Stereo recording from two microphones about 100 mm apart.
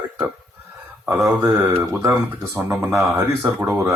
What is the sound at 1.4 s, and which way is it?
Speech, 25° right (ahead or behind).